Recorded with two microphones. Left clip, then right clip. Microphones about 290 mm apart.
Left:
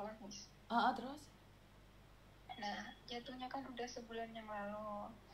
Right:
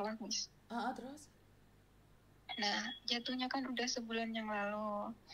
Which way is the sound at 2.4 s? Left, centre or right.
Right.